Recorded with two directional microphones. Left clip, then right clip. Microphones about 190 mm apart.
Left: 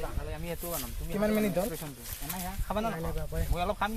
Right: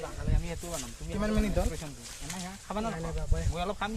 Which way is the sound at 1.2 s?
40° left (ahead or behind).